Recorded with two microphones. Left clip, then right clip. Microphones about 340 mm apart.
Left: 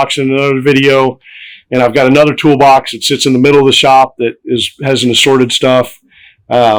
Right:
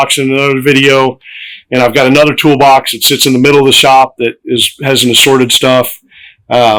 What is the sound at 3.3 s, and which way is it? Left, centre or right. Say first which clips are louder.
Speech: left 1 dB; left.